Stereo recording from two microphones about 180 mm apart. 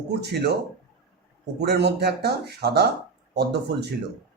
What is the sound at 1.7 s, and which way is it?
Speech, 65° right (ahead or behind).